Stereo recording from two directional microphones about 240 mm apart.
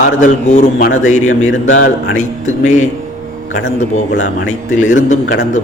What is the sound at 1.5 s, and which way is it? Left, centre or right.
Speech, left.